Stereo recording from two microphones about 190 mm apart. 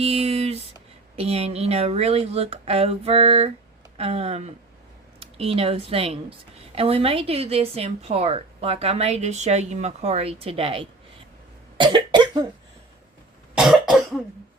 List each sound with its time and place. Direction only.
0.0 s a sound: 35° right (ahead or behind)
1.1 s a woman's voice: 30° right (ahead or behind)
11.8 s cough: 25° right (ahead or behind)
13.6 s cough: 5° right (ahead or behind)